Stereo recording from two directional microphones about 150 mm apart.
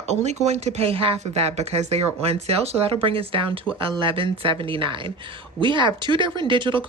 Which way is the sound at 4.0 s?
35° right (ahead or behind).